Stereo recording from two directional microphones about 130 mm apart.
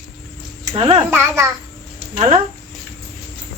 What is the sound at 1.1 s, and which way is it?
Speech, 20° right (ahead or behind).